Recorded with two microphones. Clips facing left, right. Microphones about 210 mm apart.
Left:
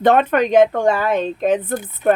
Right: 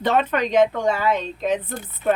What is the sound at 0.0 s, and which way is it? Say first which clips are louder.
Speech: left 6 dB; 55° left (ahead or behind).